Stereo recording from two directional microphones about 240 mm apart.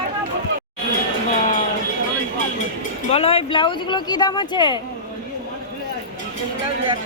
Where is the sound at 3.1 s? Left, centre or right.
Left.